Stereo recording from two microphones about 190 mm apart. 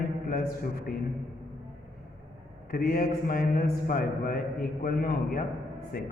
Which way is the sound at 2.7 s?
50° left (ahead or behind).